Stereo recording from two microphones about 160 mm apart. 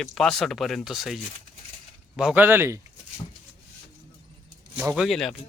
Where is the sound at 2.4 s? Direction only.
15° right (ahead or behind).